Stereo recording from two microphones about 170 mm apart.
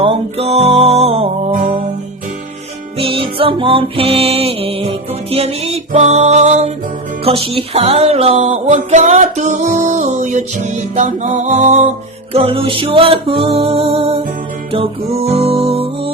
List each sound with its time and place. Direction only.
0.0 s music: 35° right (ahead or behind)
3.0 s music: 35° right (ahead or behind)